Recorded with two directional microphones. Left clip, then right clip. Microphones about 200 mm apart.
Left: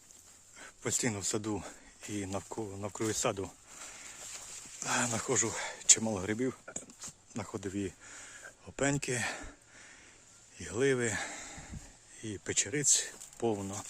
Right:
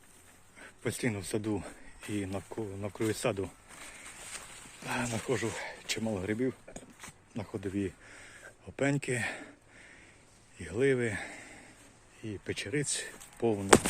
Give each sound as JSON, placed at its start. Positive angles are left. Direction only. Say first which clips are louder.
{"t": 0.6, "sound": "speech", "louder": "even", "side_deg": 10}
{"t": 4.8, "sound": "speech", "louder": "left 2 dB", "side_deg": 20}
{"t": 10.6, "sound": "speech", "louder": "right 1 dB", "side_deg": 15}